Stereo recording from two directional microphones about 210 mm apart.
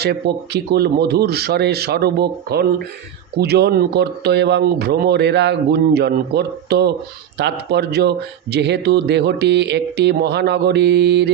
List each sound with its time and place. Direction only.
0.0 s a man's voice: 50° right (ahead or behind)